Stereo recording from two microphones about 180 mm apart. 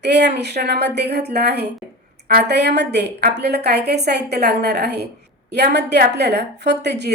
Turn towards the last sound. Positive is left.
turn(degrees=-70)  # may be behind; listen again after turning